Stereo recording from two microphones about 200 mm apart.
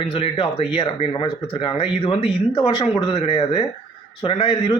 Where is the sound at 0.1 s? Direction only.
30° left (ahead or behind).